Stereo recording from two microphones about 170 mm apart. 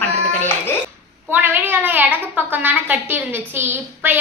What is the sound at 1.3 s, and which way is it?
A woman's voice, 10° right (ahead or behind).